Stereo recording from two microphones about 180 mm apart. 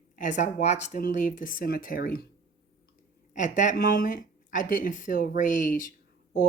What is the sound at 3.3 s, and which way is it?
Speech, 45° left (ahead or behind).